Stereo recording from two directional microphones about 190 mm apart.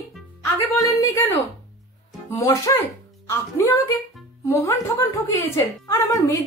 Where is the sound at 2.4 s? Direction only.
15° left (ahead or behind).